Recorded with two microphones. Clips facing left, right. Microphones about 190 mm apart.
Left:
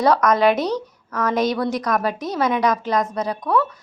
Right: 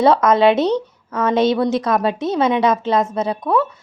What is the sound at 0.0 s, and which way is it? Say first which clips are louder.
A woman's voice: right 3 dB; 25° right (ahead or behind).